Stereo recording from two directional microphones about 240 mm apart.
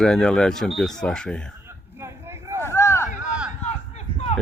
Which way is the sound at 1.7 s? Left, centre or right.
Centre.